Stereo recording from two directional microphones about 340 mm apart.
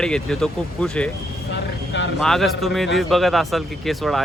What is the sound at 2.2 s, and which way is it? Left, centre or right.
Speech, centre.